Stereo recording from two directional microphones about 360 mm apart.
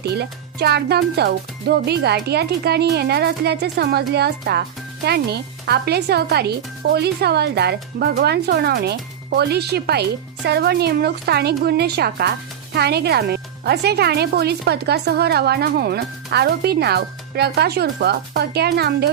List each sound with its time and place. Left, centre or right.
0.0 s speech: right